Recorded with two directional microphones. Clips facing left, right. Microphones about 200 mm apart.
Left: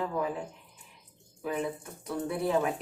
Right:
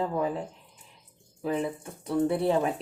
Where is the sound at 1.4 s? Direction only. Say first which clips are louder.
Right 3 dB; 30° right (ahead or behind).